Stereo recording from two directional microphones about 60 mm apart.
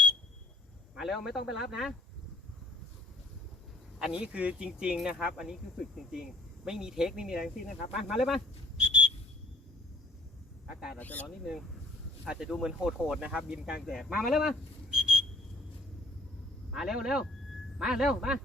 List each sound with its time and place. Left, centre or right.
0.9 s speech: centre
3.9 s speech: centre
8.8 s whistle: centre
10.7 s a sound: centre
10.9 s speech: left
12.2 s speech: centre
13.8 s speech: centre
14.3 s a sound: centre
16.7 s speech: centre